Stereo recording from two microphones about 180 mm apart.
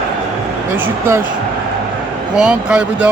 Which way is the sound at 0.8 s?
10° right (ahead or behind).